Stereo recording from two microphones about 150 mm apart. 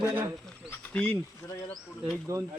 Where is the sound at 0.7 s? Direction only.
10° left (ahead or behind).